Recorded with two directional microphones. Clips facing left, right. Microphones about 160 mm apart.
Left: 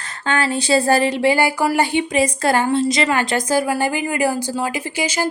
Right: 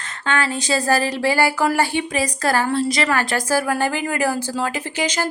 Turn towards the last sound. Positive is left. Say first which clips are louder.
# left 1 dB
turn(degrees=10)  # may be behind; listen again after turning